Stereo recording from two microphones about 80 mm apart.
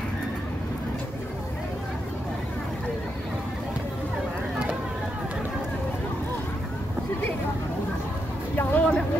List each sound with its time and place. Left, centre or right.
8.5 s music: centre